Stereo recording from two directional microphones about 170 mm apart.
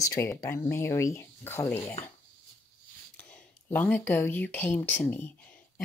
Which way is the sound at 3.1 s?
10° left (ahead or behind).